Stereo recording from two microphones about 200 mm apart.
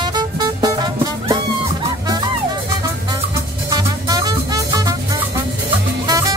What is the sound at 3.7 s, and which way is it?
Music, 20° right (ahead or behind).